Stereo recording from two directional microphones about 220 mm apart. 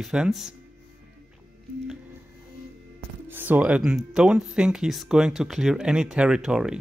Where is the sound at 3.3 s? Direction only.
10° right (ahead or behind).